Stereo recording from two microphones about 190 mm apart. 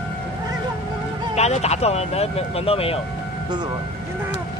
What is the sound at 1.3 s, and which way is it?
Speech, 35° left (ahead or behind).